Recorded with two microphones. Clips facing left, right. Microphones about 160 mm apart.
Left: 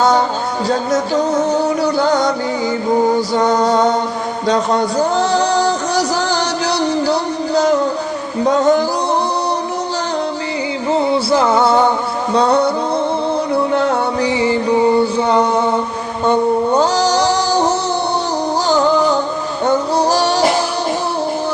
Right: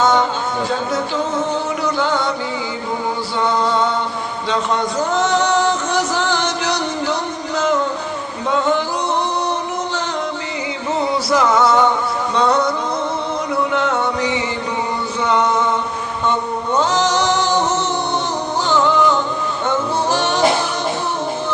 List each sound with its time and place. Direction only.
0.0 s a sound: 35° left (ahead or behind)
0.7 s music: 40° left (ahead or behind)
3.3 s music: 40° left (ahead or behind)
11.1 s music: 30° left (ahead or behind)